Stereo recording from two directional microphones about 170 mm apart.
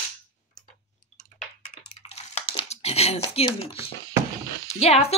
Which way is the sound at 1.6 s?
40° left (ahead or behind).